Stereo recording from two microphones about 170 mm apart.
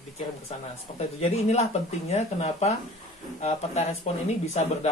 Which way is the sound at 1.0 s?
40° left (ahead or behind).